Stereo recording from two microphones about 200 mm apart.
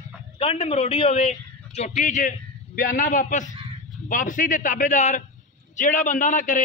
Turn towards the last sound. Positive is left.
turn(degrees=40)  # may be behind; listen again after turning